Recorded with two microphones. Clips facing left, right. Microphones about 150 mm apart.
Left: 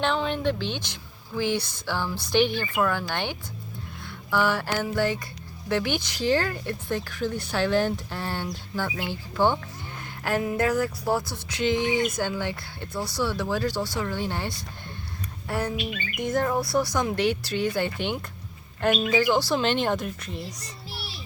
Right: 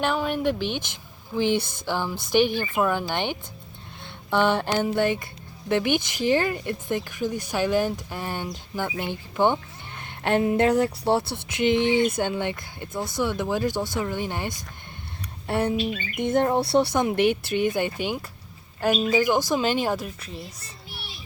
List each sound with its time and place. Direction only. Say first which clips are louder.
0.0 s speech: right 1 dB; 10° right (ahead or behind)
1.5 s a sound: right 3 dB; 50° right (ahead or behind)
1.9 s speech: right 2 dB; 15° right (ahead or behind)
15.4 s speech: right 5 dB; 25° right (ahead or behind); by 19.0 s 5° right (ahead or behind)
19.1 s speech: right 1 dB; 15° right (ahead or behind)